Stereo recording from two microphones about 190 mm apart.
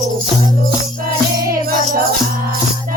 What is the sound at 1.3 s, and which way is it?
Music, 50° right (ahead or behind).